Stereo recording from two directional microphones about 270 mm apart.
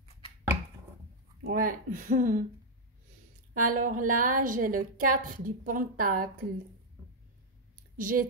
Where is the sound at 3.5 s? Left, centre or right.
Right.